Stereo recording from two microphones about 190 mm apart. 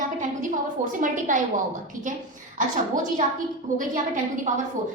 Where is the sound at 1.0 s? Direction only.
45° right (ahead or behind).